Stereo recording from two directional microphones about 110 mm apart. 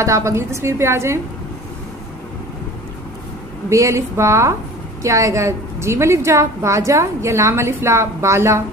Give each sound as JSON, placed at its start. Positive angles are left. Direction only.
{"t": 0.0, "sound": "a woman's voice", "side_deg": -25}
{"t": 3.7, "sound": "a woman's voice", "side_deg": -30}